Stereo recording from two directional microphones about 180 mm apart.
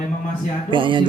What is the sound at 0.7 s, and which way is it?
Speech, 25° right (ahead or behind).